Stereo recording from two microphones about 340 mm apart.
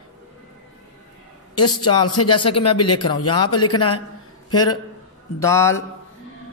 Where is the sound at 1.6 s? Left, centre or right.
Centre.